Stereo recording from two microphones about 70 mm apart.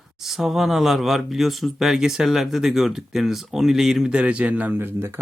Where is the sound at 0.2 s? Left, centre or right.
Centre.